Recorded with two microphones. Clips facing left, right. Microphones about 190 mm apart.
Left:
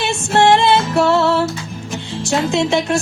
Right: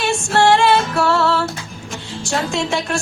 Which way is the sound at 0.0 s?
20° left (ahead or behind).